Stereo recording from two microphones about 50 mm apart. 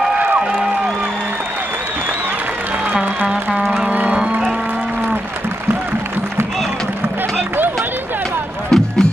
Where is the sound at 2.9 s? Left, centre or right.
Right.